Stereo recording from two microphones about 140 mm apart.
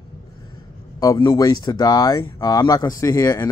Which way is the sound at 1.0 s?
25° left (ahead or behind).